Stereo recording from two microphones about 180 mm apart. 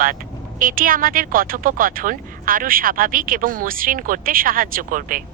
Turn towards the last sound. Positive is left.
turn(degrees=-50)  # may be behind; listen again after turning